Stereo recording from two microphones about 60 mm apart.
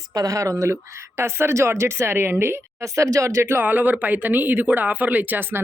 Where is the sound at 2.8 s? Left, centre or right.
Right.